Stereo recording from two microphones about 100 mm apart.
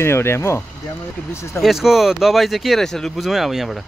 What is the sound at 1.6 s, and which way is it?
Speech, 5° right (ahead or behind).